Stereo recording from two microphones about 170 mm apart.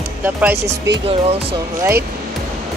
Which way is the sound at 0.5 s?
90° right.